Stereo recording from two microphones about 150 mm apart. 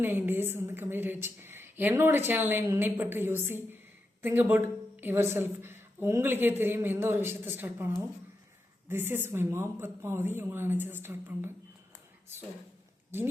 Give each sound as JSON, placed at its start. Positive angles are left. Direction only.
{"t": 0.0, "sound": "a woman's voice", "side_deg": -15}